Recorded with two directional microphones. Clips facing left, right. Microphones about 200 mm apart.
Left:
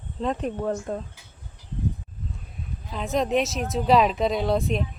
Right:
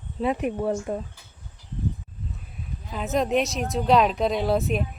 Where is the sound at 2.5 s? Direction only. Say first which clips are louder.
Right 1 dB; centre (ahead or behind).